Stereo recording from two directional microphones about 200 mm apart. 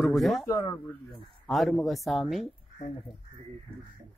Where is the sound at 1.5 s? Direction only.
Centre (ahead or behind).